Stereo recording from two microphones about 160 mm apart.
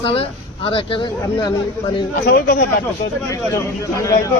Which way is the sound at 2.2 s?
75° left (ahead or behind).